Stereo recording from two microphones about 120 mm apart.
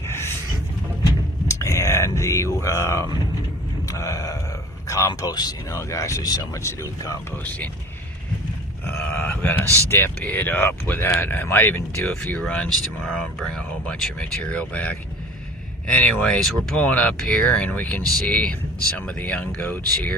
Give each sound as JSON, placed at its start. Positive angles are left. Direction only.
{"t": 1.5, "sound": "a sound", "side_deg": 25}
{"t": 4.9, "sound": "speech", "side_deg": 25}
{"t": 9.1, "sound": "speech", "side_deg": 10}
{"t": 9.6, "sound": "speech", "side_deg": -25}
{"t": 9.9, "sound": "speech", "side_deg": 15}